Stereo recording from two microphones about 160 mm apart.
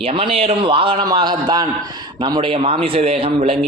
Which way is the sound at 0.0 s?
35° right (ahead or behind).